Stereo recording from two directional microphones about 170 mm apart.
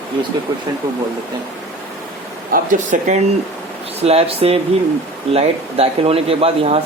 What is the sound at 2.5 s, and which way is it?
Speech, 55° right (ahead or behind).